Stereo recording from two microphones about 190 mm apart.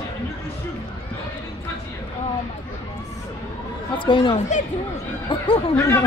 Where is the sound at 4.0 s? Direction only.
25° left (ahead or behind).